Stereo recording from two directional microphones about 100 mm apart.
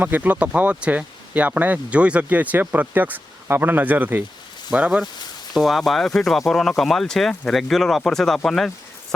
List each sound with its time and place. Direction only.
0.0 s speech: 15° right (ahead or behind); by 8.7 s 5° left (ahead or behind)